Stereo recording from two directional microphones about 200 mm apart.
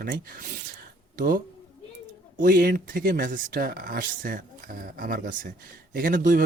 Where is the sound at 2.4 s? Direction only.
45° right (ahead or behind).